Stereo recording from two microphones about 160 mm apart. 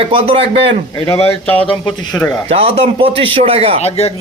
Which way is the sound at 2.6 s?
35° right (ahead or behind).